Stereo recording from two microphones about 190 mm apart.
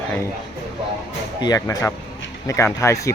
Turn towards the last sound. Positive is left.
turn(degrees=15)  # may be behind; listen again after turning